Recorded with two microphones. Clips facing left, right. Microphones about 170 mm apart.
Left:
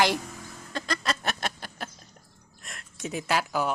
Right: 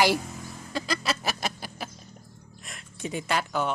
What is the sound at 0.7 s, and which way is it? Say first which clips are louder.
Chicken: right 1 dB; 5° right (ahead or behind).